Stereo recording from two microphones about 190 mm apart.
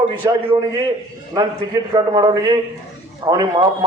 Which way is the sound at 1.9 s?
20° right (ahead or behind).